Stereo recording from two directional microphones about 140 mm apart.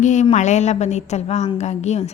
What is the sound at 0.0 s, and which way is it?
A woman's voice, 60° left (ahead or behind).